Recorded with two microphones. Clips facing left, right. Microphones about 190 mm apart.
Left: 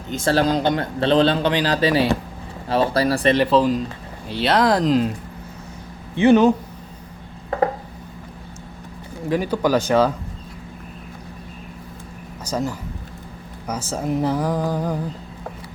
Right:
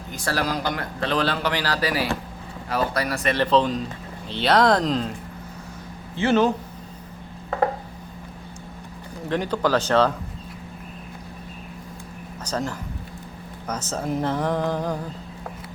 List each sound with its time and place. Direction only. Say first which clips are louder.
0.1 s a man's voice: left 7 dB; 25° left (ahead or behind)
3.3 s speech: left 3 dB; 10° left (ahead or behind)
6.1 s speech: left 6 dB; 15° left (ahead or behind)
9.3 s speech: left 3 dB; 10° left (ahead or behind)
12.5 s speech: left 3 dB; 10° left (ahead or behind)